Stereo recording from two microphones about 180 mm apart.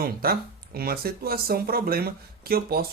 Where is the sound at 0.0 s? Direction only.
55° right (ahead or behind).